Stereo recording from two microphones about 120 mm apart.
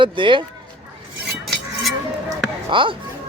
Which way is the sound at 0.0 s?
45° right (ahead or behind).